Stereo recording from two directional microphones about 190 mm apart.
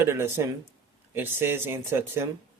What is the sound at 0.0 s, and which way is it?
Speech, 15° right (ahead or behind).